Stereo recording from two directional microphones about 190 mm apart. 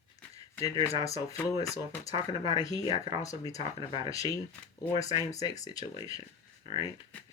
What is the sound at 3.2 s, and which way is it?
Speech, 15° left (ahead or behind).